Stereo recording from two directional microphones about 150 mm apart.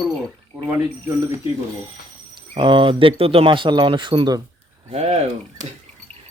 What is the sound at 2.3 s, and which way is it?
Speech, 35° right (ahead or behind).